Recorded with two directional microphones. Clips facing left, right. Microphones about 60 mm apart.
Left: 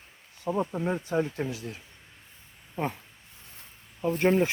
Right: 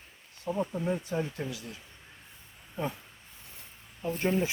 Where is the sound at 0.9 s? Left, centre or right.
Left.